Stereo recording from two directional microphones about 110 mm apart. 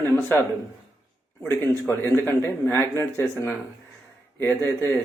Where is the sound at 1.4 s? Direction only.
20° left (ahead or behind).